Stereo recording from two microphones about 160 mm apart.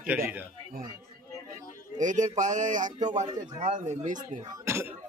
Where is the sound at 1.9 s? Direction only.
50° right (ahead or behind).